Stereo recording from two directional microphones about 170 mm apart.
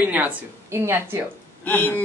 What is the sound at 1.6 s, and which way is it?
Speech, 10° left (ahead or behind).